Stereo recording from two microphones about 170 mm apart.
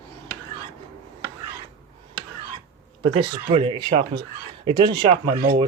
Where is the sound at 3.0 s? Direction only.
35° right (ahead or behind).